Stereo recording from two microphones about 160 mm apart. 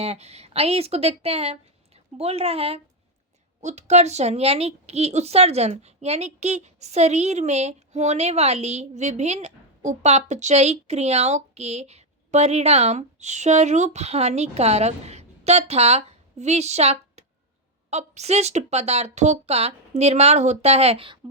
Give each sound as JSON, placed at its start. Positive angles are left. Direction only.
{"t": 0.0, "sound": "a woman's voice", "side_deg": -40}